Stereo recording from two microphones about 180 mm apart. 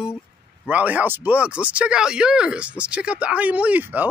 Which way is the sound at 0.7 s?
10° right (ahead or behind).